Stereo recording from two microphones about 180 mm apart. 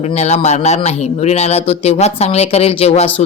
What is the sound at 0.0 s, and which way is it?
Speech, 40° left (ahead or behind).